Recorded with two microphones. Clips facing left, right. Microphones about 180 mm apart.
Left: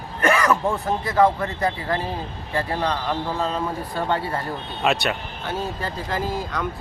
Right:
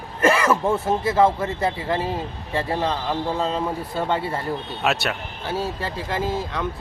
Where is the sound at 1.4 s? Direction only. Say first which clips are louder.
Right 1 dB; 25° right (ahead or behind).